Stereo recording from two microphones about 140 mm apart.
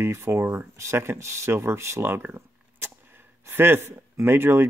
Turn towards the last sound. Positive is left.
turn(degrees=-15)  # may be behind; listen again after turning